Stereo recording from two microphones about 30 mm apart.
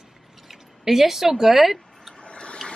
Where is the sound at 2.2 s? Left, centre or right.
Left.